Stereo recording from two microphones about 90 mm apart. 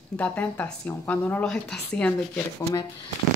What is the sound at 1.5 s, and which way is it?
Speech, 5° left (ahead or behind).